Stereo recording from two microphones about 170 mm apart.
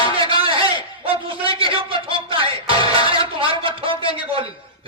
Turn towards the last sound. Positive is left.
turn(degrees=-30)  # may be behind; listen again after turning